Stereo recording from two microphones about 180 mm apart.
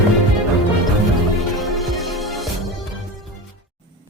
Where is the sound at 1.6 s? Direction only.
Centre (ahead or behind).